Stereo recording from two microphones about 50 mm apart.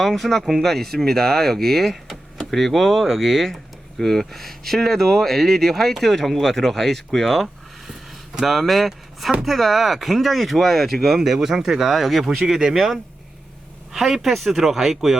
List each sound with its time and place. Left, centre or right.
0.0 s speech: centre